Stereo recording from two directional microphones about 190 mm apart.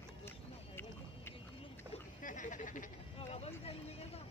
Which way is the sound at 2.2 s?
45° left (ahead or behind).